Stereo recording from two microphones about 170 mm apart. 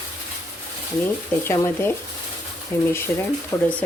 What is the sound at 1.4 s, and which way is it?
Speech, 15° left (ahead or behind).